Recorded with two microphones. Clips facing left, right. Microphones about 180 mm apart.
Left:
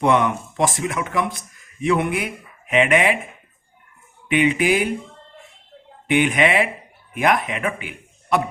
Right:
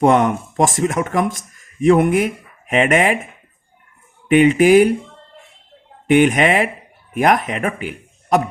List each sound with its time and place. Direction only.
0.0 s speech: 45° right (ahead or behind)
4.3 s speech: 45° right (ahead or behind)
6.1 s speech: 45° right (ahead or behind)